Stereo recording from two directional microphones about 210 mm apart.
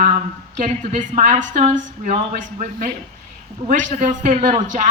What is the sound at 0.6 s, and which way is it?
Speech, 35° right (ahead or behind).